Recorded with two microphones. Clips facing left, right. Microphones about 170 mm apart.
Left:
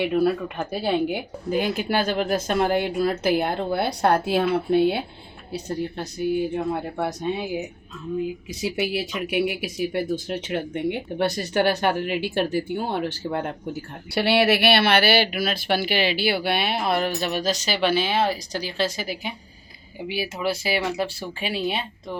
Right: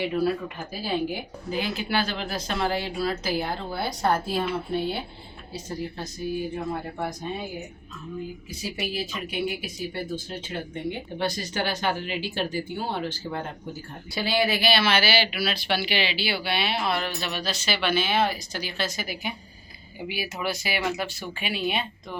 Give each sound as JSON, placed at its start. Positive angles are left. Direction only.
{"t": 0.0, "sound": "speech", "side_deg": 60}
{"t": 8.4, "sound": "speech", "side_deg": 70}
{"t": 14.1, "sound": "speech", "side_deg": 70}